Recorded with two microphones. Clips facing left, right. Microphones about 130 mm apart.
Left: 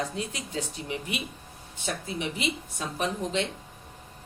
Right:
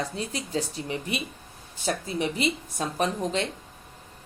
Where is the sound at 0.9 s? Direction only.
35° right (ahead or behind).